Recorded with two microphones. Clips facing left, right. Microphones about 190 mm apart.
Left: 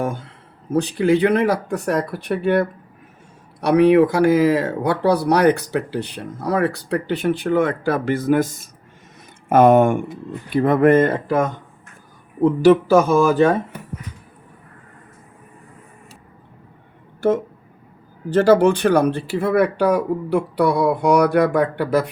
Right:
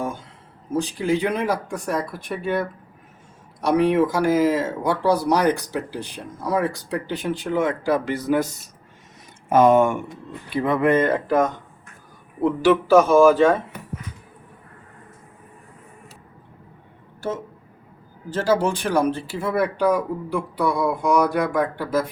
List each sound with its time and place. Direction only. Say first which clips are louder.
0.0 s speech: left 4 dB; 65° left (ahead or behind)
12.5 s speech: left 3 dB; 40° left (ahead or behind)
17.2 s speech: left 10 dB; 60° left (ahead or behind)